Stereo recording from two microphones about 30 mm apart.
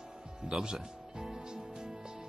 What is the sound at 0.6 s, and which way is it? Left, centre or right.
Music, right.